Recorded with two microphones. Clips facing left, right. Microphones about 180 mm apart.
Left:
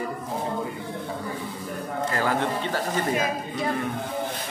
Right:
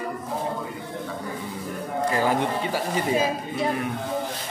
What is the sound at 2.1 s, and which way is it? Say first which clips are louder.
Speech: right 2 dB; 15° right (ahead or behind).